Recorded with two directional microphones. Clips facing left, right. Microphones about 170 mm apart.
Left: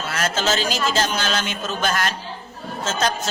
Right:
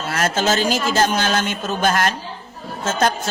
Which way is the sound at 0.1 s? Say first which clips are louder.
Right 4 dB; 50° right (ahead or behind).